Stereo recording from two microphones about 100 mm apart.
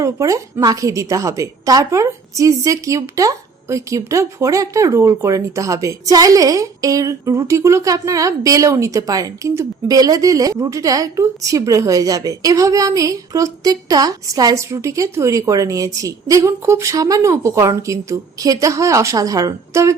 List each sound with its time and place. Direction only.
0.0 s a woman's voice: 35° right (ahead or behind)